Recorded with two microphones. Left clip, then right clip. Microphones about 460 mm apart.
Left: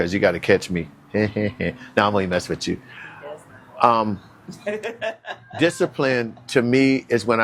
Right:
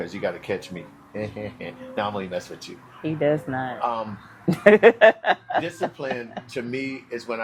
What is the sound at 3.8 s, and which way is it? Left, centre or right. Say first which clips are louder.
Speech: left 12 dB; left.